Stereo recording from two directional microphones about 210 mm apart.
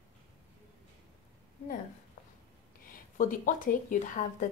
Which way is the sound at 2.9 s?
40° left (ahead or behind).